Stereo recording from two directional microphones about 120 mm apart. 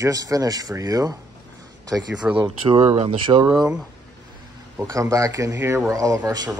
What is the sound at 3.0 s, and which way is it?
Speech, 45° right (ahead or behind).